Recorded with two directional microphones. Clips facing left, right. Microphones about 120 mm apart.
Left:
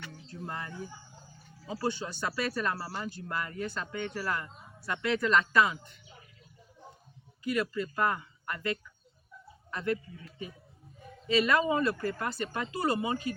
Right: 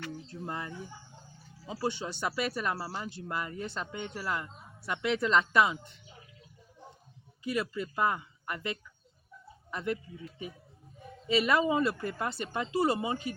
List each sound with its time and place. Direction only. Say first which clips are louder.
0.4 s speech: even; 20° right (ahead or behind)
7.4 s a man's voice: left 2 dB; 20° right (ahead or behind)